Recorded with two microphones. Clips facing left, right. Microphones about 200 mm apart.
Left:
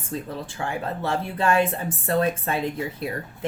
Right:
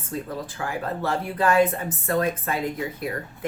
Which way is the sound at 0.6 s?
25° left (ahead or behind).